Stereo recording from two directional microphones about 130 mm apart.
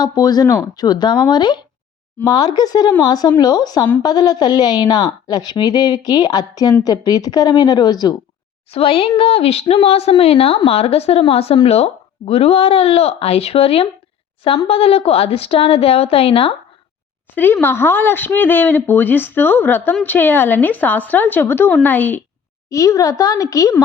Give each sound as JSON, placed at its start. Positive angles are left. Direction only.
{"t": 0.0, "sound": "a woman's voice", "side_deg": 30}
{"t": 8.7, "sound": "a woman's voice", "side_deg": 45}
{"t": 17.3, "sound": "speech", "side_deg": 15}
{"t": 22.7, "sound": "a woman's voice", "side_deg": 25}